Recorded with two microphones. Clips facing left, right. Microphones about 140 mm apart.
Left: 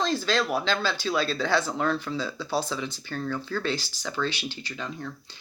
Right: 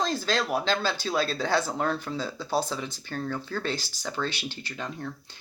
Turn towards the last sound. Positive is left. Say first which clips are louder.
# even
turn(degrees=-45)  # may be behind; listen again after turning